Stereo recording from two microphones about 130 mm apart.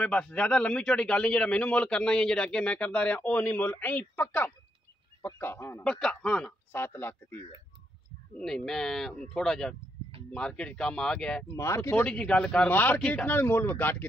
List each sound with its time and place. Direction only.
0.0 s a man's voice: 10° left (ahead or behind)
5.9 s speech: 5° left (ahead or behind)
6.7 s a man's voice: 15° left (ahead or behind)
8.4 s a man's voice: 5° left (ahead or behind)
11.5 s speech: 20° left (ahead or behind)
12.1 s a man's voice: 5° left (ahead or behind)